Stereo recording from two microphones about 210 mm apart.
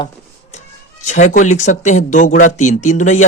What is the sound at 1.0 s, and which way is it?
Speech, 35° left (ahead or behind).